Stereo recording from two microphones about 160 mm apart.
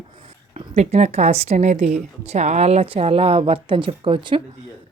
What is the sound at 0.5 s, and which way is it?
A woman's voice, 45° right (ahead or behind).